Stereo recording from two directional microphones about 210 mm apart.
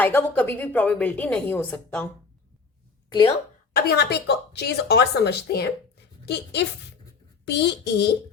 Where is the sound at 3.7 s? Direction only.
50° left (ahead or behind).